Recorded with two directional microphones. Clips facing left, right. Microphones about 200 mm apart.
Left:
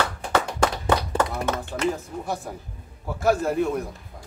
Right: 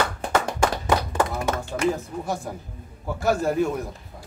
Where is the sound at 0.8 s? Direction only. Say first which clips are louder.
Even; 30° left (ahead or behind).